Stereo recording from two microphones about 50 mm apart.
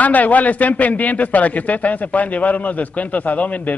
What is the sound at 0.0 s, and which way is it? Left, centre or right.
A man's voice, left.